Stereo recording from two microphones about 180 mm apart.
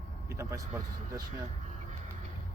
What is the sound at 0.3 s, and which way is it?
Speech, 15° right (ahead or behind).